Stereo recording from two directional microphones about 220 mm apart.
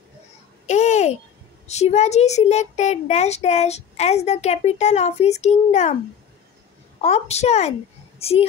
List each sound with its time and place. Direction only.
0.7 s babbling: 30° left (ahead or behind)
1.7 s a child's voice: 30° left (ahead or behind)
7.0 s a woman's voice: 30° left (ahead or behind)